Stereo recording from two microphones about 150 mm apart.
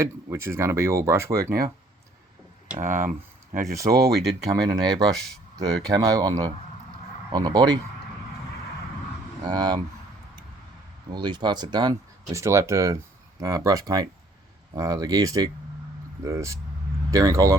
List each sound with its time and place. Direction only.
0.0 s speech: 20° right (ahead or behind)
2.8 s speech: 60° right (ahead or behind)
3.6 s speech: 20° right (ahead or behind)
3.9 s speech: 90° right
4.4 s speech: 25° right (ahead or behind)
9.4 s speech: 25° right (ahead or behind)
11.1 s speech: 30° right (ahead or behind)